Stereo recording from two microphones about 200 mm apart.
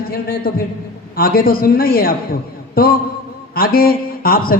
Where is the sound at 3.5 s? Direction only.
50° left (ahead or behind).